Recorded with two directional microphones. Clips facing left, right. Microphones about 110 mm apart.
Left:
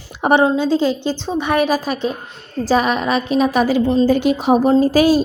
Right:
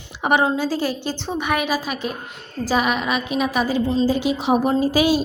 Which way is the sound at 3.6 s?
60° left (ahead or behind).